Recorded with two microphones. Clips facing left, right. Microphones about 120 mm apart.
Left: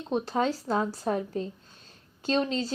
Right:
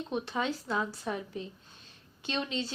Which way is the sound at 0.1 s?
35° left (ahead or behind).